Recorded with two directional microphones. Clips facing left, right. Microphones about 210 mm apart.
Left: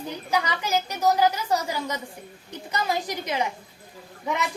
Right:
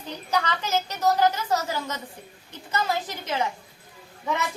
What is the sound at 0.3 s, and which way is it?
A woman's voice, 10° left (ahead or behind).